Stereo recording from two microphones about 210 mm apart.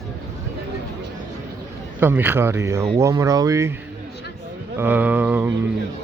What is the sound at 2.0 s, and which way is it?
Speech, 10° right (ahead or behind).